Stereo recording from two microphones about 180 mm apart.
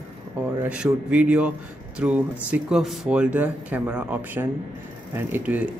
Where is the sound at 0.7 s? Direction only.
5° right (ahead or behind).